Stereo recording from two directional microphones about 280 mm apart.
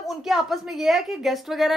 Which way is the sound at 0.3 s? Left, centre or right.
Centre.